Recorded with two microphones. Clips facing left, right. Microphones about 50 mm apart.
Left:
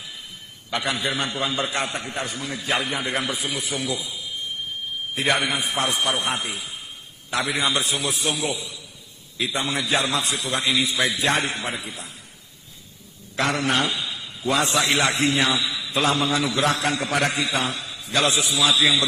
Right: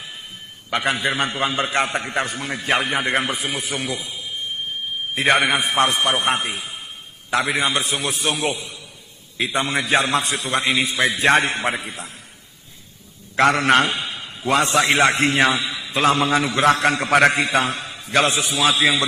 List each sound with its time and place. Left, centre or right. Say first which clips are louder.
0.7 s a man's voice: right 4 dB; right
5.2 s a man's voice: right 5 dB; right
13.3 s a man's voice: right 7 dB; right